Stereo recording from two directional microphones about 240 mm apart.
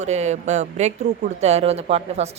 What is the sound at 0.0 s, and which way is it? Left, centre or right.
A woman's voice, right.